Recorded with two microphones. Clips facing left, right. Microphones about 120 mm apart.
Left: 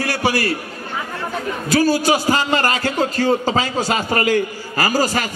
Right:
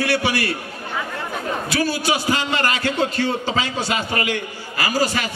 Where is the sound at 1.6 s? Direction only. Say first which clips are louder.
Left 7 dB; 40° left (ahead or behind).